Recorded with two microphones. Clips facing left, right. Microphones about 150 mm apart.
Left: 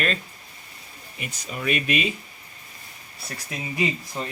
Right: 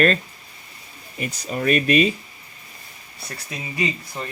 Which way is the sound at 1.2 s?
40° right (ahead or behind).